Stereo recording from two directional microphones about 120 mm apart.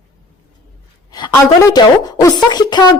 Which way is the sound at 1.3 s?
30° left (ahead or behind).